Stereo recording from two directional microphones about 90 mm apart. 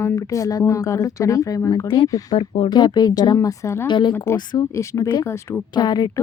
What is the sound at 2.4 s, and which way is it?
Speech, 90° left.